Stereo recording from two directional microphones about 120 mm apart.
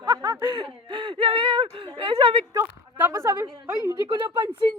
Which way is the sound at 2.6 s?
20° right (ahead or behind).